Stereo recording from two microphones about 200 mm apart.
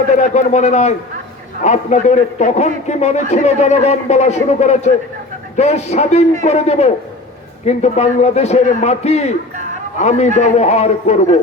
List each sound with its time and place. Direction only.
0.2 s a man's voice: 35° left (ahead or behind)